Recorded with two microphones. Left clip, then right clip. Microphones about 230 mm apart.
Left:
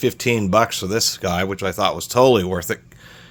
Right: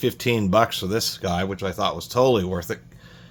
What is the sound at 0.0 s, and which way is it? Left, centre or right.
Speech, left.